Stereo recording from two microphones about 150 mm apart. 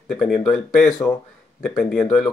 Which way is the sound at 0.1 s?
5° left (ahead or behind).